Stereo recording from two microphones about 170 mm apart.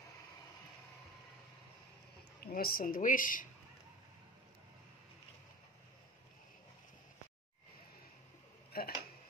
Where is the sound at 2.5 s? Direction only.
60° left (ahead or behind).